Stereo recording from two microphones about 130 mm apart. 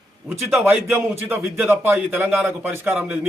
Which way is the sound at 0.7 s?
20° right (ahead or behind).